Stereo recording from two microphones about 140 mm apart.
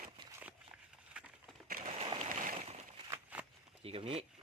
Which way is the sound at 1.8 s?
50° right (ahead or behind).